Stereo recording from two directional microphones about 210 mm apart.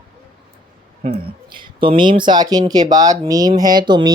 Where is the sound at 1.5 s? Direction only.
25° right (ahead or behind).